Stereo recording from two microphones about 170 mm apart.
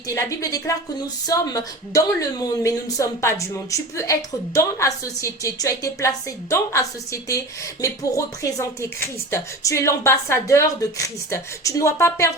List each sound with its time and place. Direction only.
0.1 s a woman's voice: 20° left (ahead or behind)